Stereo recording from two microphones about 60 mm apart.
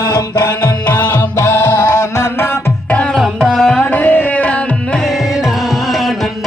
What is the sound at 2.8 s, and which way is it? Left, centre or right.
Tabla, left.